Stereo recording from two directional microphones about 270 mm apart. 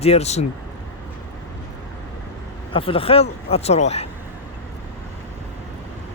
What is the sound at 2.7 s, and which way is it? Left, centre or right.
Speech, centre.